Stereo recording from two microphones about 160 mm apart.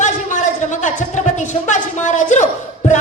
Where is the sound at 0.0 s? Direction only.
50° left (ahead or behind).